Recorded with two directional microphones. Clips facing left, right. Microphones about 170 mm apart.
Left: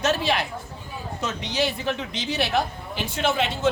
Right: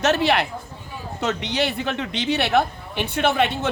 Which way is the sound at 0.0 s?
65° right (ahead or behind).